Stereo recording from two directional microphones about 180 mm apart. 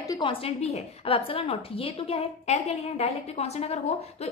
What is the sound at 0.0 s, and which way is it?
A woman's voice, 25° left (ahead or behind).